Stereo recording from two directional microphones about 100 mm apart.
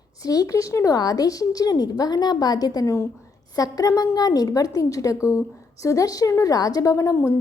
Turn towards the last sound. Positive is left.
turn(degrees=35)  # may be behind; listen again after turning